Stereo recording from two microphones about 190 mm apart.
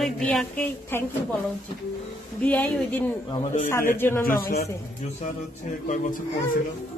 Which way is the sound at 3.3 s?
30° left (ahead or behind).